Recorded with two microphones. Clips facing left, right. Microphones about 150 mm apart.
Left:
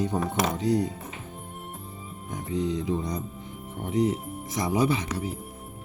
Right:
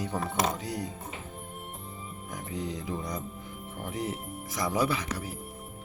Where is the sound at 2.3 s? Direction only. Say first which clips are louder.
Left 7 dB; 25° left (ahead or behind).